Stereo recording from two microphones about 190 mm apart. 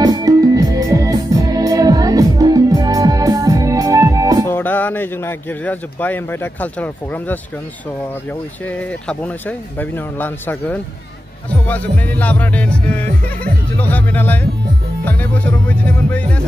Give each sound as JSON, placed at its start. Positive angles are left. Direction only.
{"t": 0.0, "sound": "music", "side_deg": -20}
{"t": 4.5, "sound": "a man's voice", "side_deg": 10}
{"t": 8.6, "sound": "a man's voice", "side_deg": 10}